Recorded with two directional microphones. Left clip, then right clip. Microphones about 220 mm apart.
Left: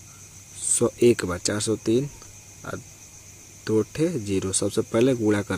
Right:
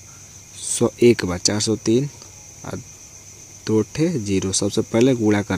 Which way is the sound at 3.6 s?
15° right (ahead or behind).